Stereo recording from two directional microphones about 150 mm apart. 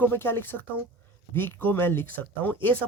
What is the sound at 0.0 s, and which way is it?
Speech, 15° left (ahead or behind).